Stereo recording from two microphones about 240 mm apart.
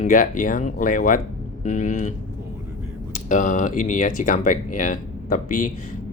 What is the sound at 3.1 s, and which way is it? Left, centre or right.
Speech, left.